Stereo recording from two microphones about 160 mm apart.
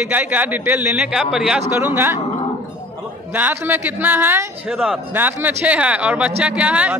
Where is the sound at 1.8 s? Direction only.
15° right (ahead or behind).